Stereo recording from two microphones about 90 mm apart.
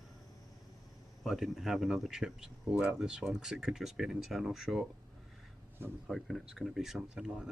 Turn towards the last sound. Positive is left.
turn(degrees=-5)  # may be behind; listen again after turning